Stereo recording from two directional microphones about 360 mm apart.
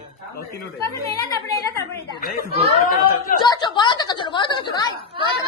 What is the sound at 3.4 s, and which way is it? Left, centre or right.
A woman's voice, centre.